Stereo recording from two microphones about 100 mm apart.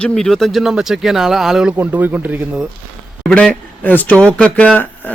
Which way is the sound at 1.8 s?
20° right (ahead or behind).